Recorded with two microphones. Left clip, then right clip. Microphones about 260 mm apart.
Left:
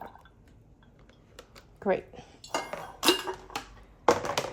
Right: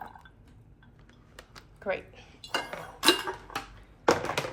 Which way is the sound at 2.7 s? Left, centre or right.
Centre.